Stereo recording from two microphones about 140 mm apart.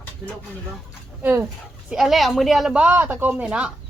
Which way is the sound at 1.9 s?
Centre (ahead or behind).